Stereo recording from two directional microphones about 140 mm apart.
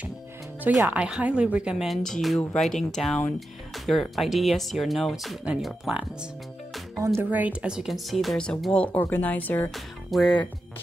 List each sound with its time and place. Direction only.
0.7 s a woman's voice: 10° right (ahead or behind)
7.0 s a woman's voice: 15° right (ahead or behind); by 10.5 s 5° left (ahead or behind)